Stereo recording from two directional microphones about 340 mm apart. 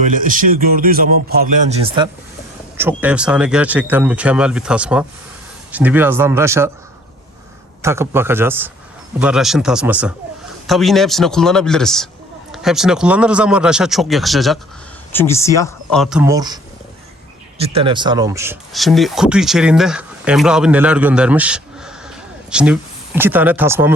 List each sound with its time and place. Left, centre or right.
0.0 s a man's voice: right
2.7 s speech: centre
7.8 s speech: centre
17.6 s speech: centre